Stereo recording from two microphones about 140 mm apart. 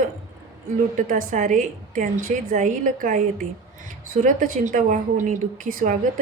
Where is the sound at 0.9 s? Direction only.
65° right (ahead or behind).